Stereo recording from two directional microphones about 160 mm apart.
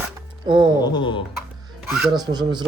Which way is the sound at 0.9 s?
30° left (ahead or behind).